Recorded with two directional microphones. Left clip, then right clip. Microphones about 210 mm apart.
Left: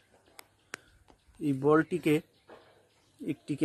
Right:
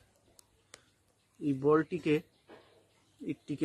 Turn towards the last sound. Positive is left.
turn(degrees=35)  # may be behind; listen again after turning